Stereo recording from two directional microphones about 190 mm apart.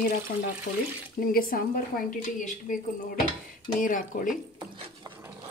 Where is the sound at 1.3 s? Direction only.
50° left (ahead or behind).